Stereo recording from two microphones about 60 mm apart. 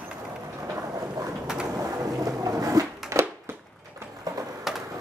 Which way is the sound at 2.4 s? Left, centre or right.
Right.